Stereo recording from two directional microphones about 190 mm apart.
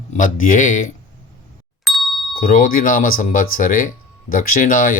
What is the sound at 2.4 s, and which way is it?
Speech, 45° left (ahead or behind).